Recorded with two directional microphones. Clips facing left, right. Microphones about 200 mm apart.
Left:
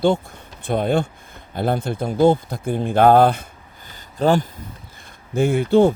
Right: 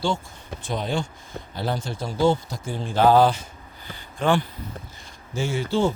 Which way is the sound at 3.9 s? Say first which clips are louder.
Left 4 dB; 40° left (ahead or behind).